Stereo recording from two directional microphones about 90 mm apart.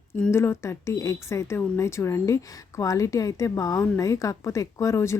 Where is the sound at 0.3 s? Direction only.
30° left (ahead or behind).